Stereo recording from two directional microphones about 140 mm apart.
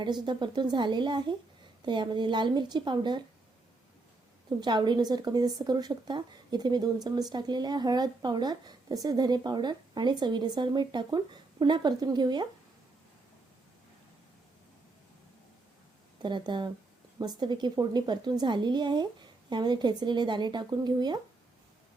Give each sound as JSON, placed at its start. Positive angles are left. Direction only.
{"t": 0.0, "sound": "speech", "side_deg": -30}
{"t": 4.6, "sound": "speech", "side_deg": -30}
{"t": 16.2, "sound": "speech", "side_deg": -35}